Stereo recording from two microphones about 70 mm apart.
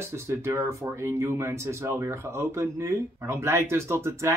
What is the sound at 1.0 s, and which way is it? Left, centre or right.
Speech, right.